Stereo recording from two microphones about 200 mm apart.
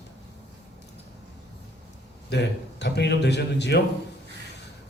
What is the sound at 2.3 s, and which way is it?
A man's voice, 55° left (ahead or behind).